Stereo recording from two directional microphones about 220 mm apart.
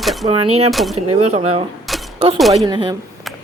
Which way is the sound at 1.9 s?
Centre (ahead or behind).